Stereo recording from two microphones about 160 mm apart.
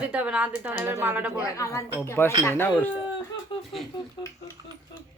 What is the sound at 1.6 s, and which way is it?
Speech, 20° left (ahead or behind).